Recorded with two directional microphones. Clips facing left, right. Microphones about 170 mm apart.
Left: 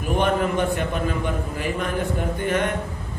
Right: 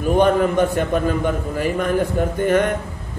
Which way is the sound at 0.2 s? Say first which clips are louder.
Right 5 dB; 40° right (ahead or behind).